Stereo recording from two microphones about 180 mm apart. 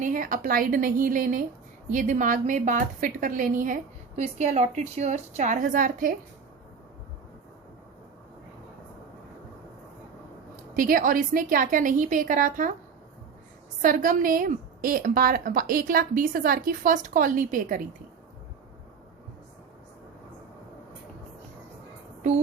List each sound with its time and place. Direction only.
0.0 s a woman's voice: 50° right (ahead or behind)
10.8 s a woman's voice: 50° right (ahead or behind)
13.8 s a woman's voice: 50° right (ahead or behind)